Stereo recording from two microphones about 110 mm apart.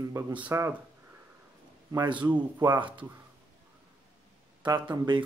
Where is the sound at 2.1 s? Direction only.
15° right (ahead or behind).